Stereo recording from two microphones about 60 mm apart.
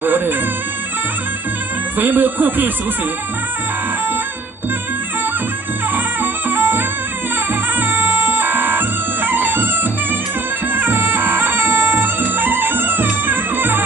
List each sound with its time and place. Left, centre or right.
0.0 s music: right
2.0 s speech: right
6.5 s music: right
7.8 s music: right
10.7 s music: right